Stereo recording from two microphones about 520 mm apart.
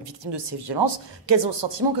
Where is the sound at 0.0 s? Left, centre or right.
Right.